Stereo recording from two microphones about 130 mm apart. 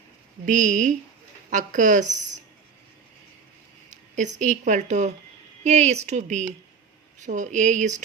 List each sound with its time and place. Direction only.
0.4 s a woman's voice: 80° right
4.1 s speech: 75° right (ahead or behind)